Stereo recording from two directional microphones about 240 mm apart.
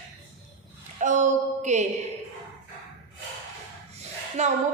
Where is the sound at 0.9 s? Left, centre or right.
Right.